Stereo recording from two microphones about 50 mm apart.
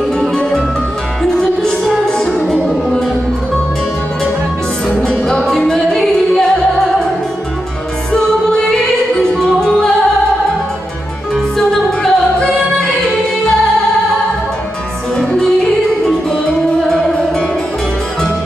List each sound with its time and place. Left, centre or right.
1.3 s music: centre
4.8 s music: centre
5.4 s music: centre
8.1 s music: centre
9.2 s opera: centre
11.5 s music: centre